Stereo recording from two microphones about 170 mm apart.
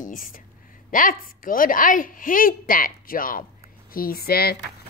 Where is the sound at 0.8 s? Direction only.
50° left (ahead or behind).